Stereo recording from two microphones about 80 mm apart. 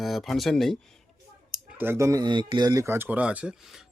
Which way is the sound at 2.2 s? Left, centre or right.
Right.